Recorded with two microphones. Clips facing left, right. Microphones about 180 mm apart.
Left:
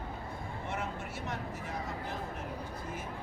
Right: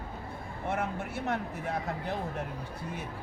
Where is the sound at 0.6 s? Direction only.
55° right (ahead or behind).